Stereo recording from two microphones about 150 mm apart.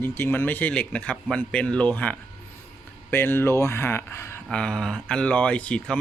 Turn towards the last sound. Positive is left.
turn(degrees=10)  # may be behind; listen again after turning